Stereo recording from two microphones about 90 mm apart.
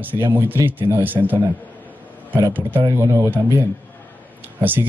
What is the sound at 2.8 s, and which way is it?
Speech, 35° right (ahead or behind).